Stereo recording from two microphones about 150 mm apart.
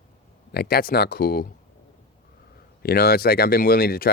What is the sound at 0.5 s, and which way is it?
Speech, 90° left.